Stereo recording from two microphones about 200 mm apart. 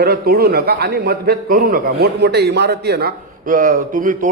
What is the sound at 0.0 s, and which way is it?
A man's voice, 50° right (ahead or behind).